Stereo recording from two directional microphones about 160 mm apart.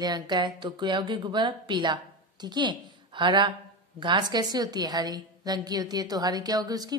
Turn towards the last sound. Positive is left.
turn(degrees=-25)  # may be behind; listen again after turning